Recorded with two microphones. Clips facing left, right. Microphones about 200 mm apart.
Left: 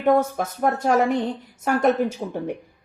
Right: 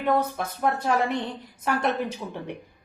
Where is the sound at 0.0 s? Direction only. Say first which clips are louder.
Left 5 dB; 50° left (ahead or behind).